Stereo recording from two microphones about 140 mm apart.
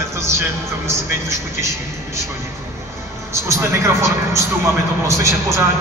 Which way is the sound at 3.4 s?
20° right (ahead or behind).